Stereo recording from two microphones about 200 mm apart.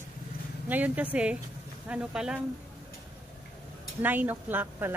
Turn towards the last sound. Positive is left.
turn(degrees=-10)  # may be behind; listen again after turning